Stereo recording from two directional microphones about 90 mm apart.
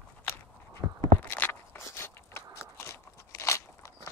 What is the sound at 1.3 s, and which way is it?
Crunch, 25° left (ahead or behind).